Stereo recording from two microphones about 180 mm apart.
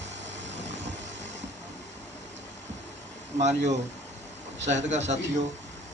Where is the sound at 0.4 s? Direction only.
40° right (ahead or behind).